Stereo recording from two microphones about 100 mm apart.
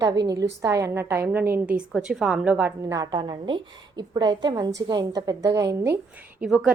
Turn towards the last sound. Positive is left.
turn(degrees=-5)  # may be behind; listen again after turning